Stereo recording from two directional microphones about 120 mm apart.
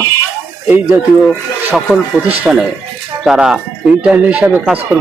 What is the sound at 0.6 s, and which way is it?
Speech, 15° right (ahead or behind).